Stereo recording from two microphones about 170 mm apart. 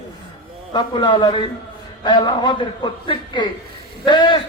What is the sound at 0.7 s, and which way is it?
Speech, 25° left (ahead or behind).